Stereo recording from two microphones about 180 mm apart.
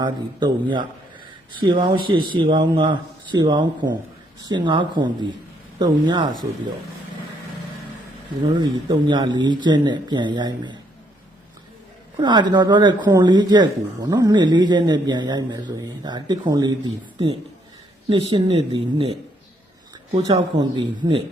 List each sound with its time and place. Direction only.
0.0 s a man's voice: 25° right (ahead or behind)
8.4 s a man's voice: 25° right (ahead or behind)
12.1 s a man's voice: 25° right (ahead or behind)
20.1 s a man's voice: 25° right (ahead or behind)